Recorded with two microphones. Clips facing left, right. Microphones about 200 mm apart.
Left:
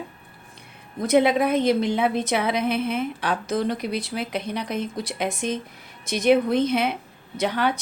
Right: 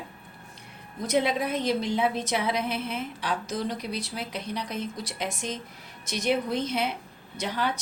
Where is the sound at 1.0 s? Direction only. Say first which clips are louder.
Left 7 dB; 60° left (ahead or behind).